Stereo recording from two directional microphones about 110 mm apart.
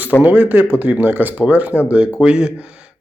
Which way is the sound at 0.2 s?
15° right (ahead or behind).